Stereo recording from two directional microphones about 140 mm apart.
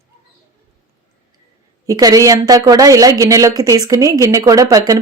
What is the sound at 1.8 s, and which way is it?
A woman's voice, 25° right (ahead or behind).